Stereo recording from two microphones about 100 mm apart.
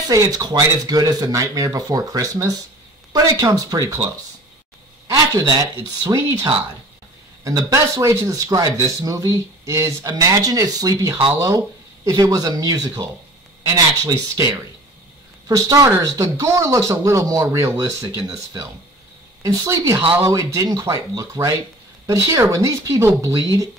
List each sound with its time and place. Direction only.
0.1 s speech: 40° right (ahead or behind)
5.0 s speech: 35° right (ahead or behind)
15.4 s speech: 35° right (ahead or behind)
19.4 s speech: 35° right (ahead or behind)
20.8 s speech: 30° right (ahead or behind)